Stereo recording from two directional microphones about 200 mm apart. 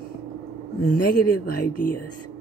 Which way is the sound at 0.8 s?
50° left (ahead or behind).